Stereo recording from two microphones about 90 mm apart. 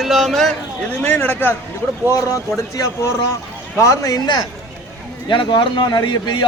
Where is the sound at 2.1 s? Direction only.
35° left (ahead or behind).